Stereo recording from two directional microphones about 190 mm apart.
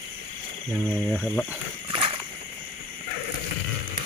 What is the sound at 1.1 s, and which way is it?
Speech, 5° left (ahead or behind).